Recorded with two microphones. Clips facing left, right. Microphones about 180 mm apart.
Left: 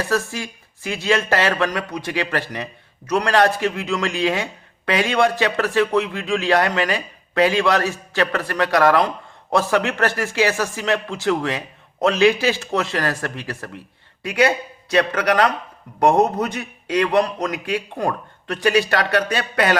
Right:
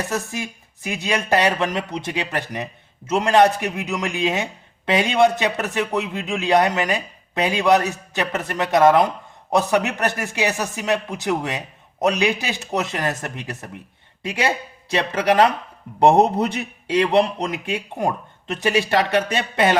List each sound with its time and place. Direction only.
0.1 s a man's voice: 20° right (ahead or behind)